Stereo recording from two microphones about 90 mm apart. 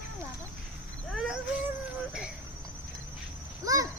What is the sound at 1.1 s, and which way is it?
Speech, centre (ahead or behind).